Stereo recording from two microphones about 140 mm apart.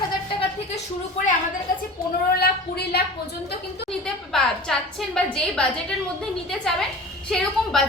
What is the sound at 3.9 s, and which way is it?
A woman's voice, 5° left (ahead or behind).